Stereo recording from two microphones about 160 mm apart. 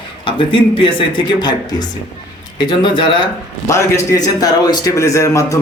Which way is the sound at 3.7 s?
20° left (ahead or behind).